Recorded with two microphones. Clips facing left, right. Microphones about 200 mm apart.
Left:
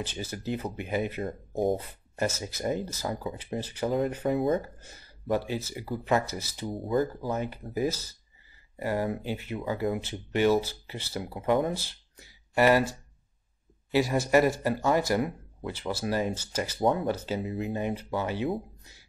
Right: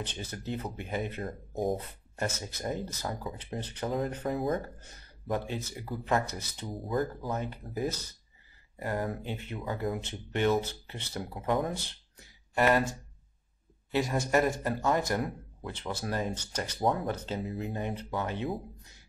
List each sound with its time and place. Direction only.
0.0 s speech: 5° left (ahead or behind)
13.9 s speech: 5° left (ahead or behind)